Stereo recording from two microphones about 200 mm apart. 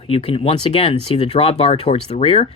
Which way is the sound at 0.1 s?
30° left (ahead or behind).